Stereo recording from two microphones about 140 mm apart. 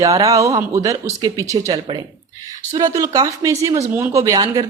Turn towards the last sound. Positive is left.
turn(degrees=-25)  # may be behind; listen again after turning